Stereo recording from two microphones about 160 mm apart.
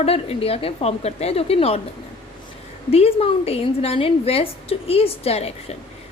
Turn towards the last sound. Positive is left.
turn(degrees=40)  # may be behind; listen again after turning